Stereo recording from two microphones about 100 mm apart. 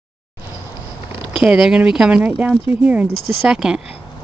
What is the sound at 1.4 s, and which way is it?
Speech, 10° right (ahead or behind).